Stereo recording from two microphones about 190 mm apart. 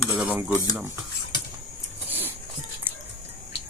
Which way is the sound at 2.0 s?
10° right (ahead or behind).